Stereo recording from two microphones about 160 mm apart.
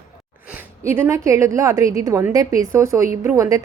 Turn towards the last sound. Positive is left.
turn(degrees=-20)  # may be behind; listen again after turning